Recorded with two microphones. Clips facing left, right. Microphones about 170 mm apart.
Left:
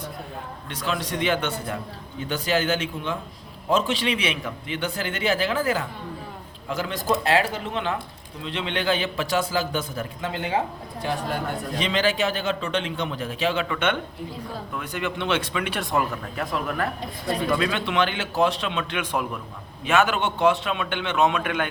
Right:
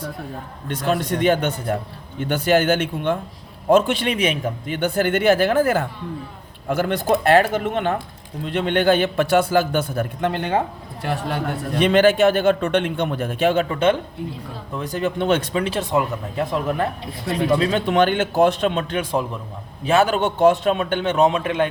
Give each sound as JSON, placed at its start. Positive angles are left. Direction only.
{"t": 0.7, "sound": "a man's voice", "side_deg": -50}
{"t": 2.2, "sound": "a man's voice", "side_deg": -60}
{"t": 11.8, "sound": "a man's voice", "side_deg": -50}
{"t": 13.7, "sound": "a man's voice", "side_deg": -30}